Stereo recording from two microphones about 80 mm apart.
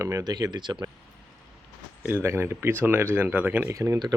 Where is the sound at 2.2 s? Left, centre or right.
Right.